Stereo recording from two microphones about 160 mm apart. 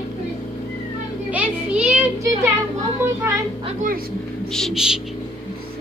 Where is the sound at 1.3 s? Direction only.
10° right (ahead or behind).